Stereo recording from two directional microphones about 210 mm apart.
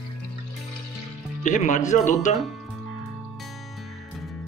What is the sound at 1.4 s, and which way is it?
Speech, 35° left (ahead or behind).